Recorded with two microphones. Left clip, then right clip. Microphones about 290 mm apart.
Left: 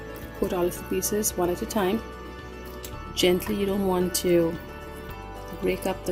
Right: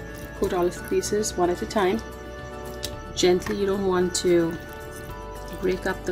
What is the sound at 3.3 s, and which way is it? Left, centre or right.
Speech, centre.